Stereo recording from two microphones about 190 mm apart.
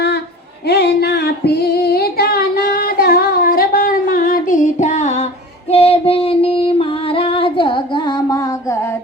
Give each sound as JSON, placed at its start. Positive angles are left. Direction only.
{"t": 0.7, "sound": "female singing", "side_deg": 60}